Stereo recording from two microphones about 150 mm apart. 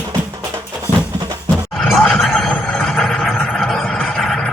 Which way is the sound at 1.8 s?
5° left (ahead or behind).